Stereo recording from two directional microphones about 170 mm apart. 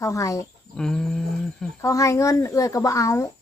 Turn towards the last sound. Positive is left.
turn(degrees=20)  # may be behind; listen again after turning